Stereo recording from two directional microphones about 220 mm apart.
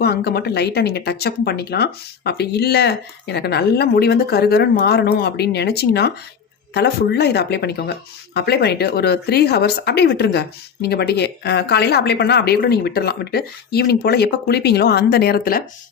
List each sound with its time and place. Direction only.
0.0 s speech: 45° left (ahead or behind)